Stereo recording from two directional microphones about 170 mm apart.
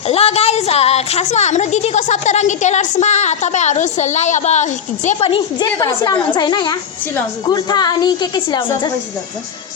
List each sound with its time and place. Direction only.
0.1 s a woman's voice: 35° left (ahead or behind)
5.8 s a woman's voice: 20° left (ahead or behind)